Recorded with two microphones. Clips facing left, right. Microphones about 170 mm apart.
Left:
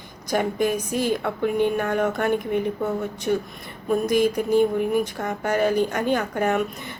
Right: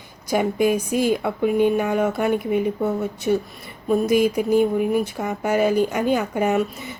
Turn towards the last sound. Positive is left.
turn(degrees=-10)  # may be behind; listen again after turning